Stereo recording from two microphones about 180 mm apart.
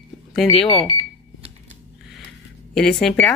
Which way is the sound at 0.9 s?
30° right (ahead or behind).